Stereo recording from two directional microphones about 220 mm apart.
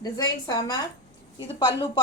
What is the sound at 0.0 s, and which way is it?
A woman's voice, 20° left (ahead or behind).